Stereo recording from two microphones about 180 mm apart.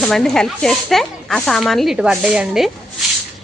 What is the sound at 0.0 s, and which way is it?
A woman's voice, 5° left (ahead or behind).